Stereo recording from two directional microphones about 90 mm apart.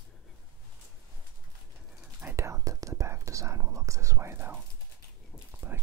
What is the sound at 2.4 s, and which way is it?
Whispering, 35° right (ahead or behind).